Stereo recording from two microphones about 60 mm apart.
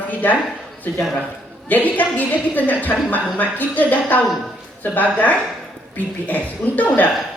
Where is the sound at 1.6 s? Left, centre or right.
Left.